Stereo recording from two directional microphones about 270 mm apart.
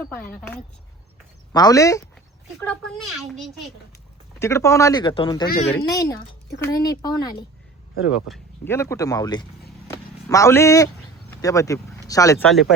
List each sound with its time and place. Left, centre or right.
0.0 s a child's voice: centre
5.5 s speech: left
5.7 s speech: centre
9.8 s vehicle: centre
11.3 s speech: centre